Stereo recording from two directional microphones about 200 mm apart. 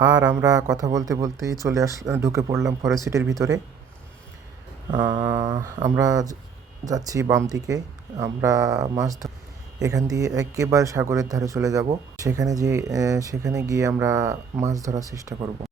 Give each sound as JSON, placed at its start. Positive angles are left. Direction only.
{"t": 0.0, "sound": "speech", "side_deg": -20}
{"t": 4.9, "sound": "speech", "side_deg": -20}